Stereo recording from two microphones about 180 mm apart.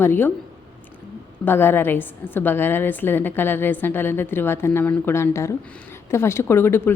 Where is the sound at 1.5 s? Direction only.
10° left (ahead or behind).